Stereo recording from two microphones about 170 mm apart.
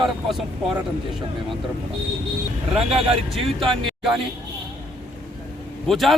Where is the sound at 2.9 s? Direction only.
35° right (ahead or behind).